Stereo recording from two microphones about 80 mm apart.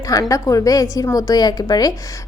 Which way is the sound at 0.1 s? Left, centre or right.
Left.